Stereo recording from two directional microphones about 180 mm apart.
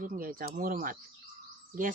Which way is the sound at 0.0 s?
50° right (ahead or behind).